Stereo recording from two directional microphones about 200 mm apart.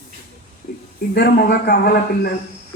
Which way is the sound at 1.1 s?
50° left (ahead or behind).